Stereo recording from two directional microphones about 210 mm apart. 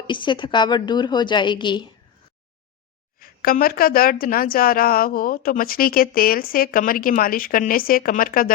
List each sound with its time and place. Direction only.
0.1 s a woman's voice: 20° left (ahead or behind)
3.2 s a woman's voice: 45° left (ahead or behind)